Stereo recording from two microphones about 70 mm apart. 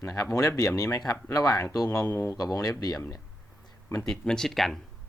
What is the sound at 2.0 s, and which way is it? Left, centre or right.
Speech, left.